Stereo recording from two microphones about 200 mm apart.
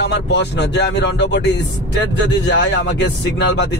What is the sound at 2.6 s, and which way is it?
Speech, 60° left (ahead or behind).